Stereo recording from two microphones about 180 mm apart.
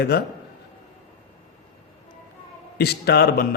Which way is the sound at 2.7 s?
65° left (ahead or behind).